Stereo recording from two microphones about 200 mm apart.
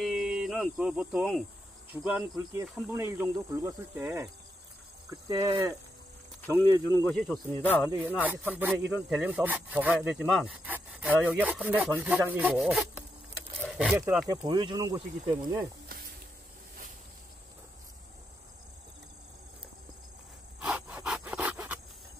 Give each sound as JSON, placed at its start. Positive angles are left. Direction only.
{"t": 0.0, "sound": "a sound", "side_deg": 0}
{"t": 1.9, "sound": "speech", "side_deg": -10}
{"t": 7.1, "sound": "speech", "side_deg": 5}
{"t": 8.3, "sound": "speech", "side_deg": -10}
{"t": 13.6, "sound": "a sound", "side_deg": 0}
{"t": 13.9, "sound": "speech", "side_deg": -15}
{"t": 20.6, "sound": "rub", "side_deg": -5}